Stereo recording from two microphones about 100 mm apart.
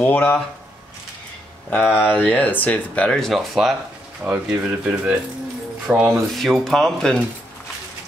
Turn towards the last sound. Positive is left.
turn(degrees=5)  # may be behind; listen again after turning